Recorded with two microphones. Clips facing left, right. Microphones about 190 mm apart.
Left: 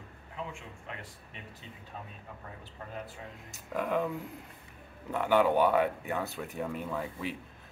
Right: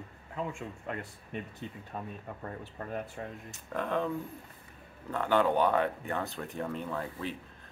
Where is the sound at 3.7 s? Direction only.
10° left (ahead or behind).